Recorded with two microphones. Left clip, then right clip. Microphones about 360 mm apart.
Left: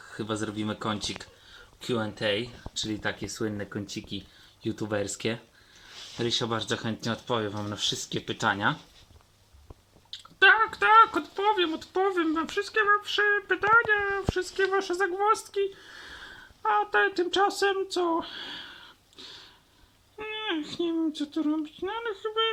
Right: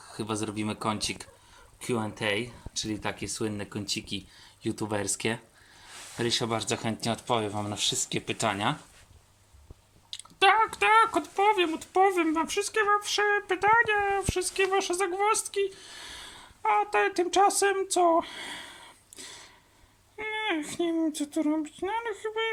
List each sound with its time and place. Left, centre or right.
0.1 s speech: centre
6.1 s speech: centre
10.1 s speech: centre